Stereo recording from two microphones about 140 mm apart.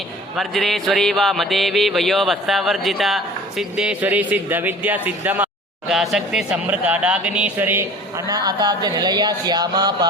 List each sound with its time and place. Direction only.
0.3 s music: centre (ahead or behind)
3.6 s speech: 5° right (ahead or behind)
8.3 s speech: 30° right (ahead or behind)